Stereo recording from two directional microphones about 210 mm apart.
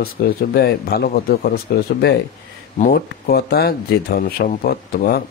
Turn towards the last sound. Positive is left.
turn(degrees=45)  # may be behind; listen again after turning